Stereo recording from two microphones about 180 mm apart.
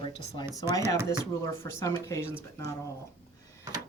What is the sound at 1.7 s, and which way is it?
Speech, 15° left (ahead or behind).